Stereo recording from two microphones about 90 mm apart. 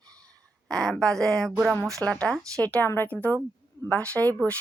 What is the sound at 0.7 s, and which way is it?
A woman's voice, 5° left (ahead or behind).